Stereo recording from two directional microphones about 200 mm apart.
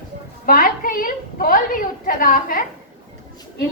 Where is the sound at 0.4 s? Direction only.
45° left (ahead or behind).